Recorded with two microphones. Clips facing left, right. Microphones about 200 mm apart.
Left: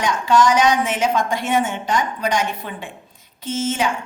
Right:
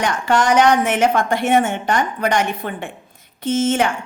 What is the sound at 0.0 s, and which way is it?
A woman's voice, 60° right (ahead or behind).